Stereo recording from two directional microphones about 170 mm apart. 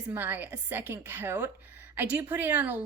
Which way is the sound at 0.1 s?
10° right (ahead or behind).